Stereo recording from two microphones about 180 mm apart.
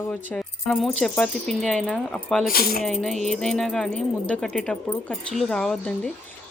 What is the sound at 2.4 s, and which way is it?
Speech, 55° left (ahead or behind).